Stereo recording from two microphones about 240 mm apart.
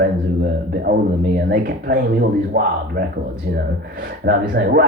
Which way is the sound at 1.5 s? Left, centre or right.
Right.